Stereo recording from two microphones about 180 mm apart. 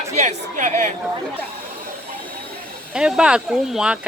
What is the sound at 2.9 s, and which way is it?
Speech, 5° right (ahead or behind).